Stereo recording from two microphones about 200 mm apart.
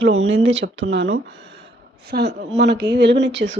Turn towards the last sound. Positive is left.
turn(degrees=-65)  # may be behind; listen again after turning